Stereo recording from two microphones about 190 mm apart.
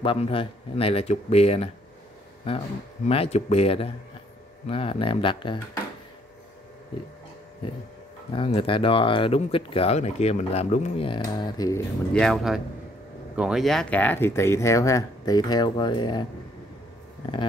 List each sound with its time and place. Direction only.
0.0 s speech: 30° left (ahead or behind)
8.4 s speech: 30° left (ahead or behind)
12.1 s speech: 5° left (ahead or behind); by 16.3 s 25° left (ahead or behind)